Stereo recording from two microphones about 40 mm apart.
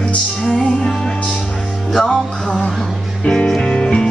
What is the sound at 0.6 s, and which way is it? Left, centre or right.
Music, centre.